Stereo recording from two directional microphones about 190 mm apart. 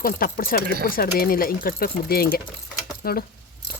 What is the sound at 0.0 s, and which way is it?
Speech, 50° left (ahead or behind).